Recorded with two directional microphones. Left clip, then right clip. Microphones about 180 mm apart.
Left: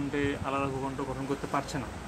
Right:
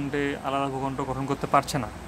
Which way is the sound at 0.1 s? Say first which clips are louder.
Right 4 dB; 20° right (ahead or behind).